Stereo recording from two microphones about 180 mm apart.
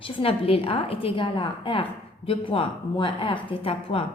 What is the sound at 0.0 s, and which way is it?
A woman's voice, 30° left (ahead or behind).